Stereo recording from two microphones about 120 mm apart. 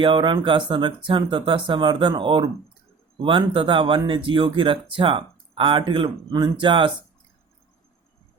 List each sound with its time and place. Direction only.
0.0 s speech: 40° right (ahead or behind)